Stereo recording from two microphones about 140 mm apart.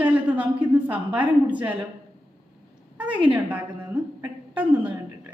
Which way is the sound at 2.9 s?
10° right (ahead or behind).